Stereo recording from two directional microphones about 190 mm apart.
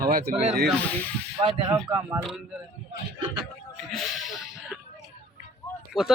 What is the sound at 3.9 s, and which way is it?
Speech, centre (ahead or behind).